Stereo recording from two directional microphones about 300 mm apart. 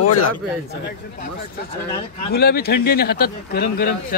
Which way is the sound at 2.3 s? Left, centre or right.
Left.